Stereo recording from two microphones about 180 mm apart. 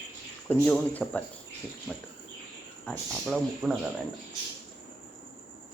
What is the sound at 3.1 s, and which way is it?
Speech, 5° right (ahead or behind).